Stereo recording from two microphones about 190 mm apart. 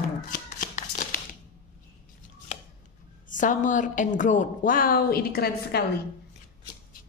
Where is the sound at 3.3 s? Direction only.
40° left (ahead or behind).